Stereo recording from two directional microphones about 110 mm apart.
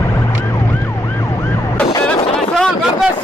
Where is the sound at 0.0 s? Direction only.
20° left (ahead or behind).